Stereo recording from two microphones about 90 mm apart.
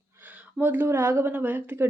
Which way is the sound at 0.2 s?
20° right (ahead or behind).